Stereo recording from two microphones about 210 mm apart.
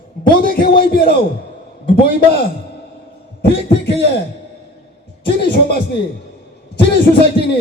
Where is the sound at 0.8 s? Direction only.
45° left (ahead or behind).